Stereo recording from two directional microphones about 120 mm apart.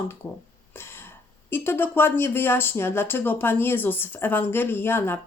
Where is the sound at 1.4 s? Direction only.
20° left (ahead or behind).